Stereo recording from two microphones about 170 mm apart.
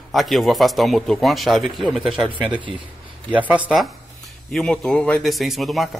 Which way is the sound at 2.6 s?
30° right (ahead or behind).